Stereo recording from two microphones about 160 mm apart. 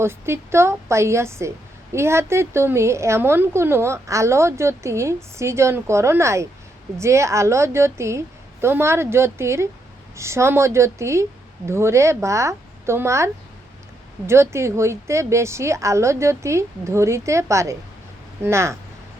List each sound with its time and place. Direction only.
0.0 s a woman's voice: 15° right (ahead or behind)